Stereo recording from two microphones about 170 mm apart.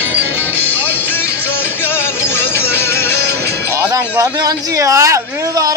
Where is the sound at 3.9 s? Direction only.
20° right (ahead or behind).